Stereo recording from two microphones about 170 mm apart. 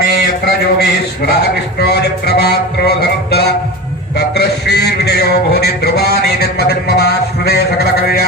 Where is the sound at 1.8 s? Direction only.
75° left (ahead or behind).